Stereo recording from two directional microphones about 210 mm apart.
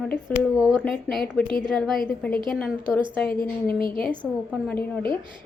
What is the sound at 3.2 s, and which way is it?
Speech, 45° left (ahead or behind).